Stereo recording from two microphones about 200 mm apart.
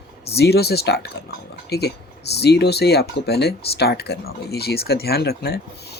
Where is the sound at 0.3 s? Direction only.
55° left (ahead or behind).